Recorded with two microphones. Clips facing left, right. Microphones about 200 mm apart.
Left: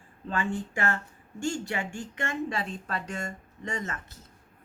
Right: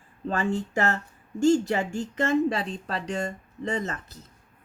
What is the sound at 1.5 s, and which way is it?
Speech, 40° right (ahead or behind).